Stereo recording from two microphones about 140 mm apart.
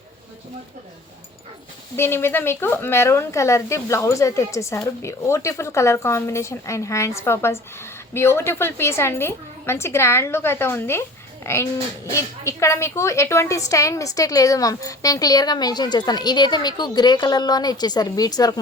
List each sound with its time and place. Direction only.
2.0 s a woman's voice: 15° left (ahead or behind)